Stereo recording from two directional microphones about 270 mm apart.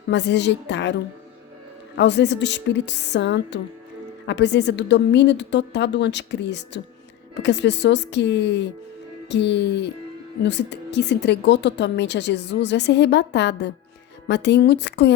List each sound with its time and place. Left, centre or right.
0.1 s a woman's voice: left
2.0 s a woman's voice: left